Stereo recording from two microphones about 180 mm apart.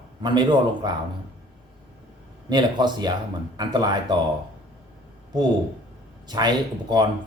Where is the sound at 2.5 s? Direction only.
25° right (ahead or behind).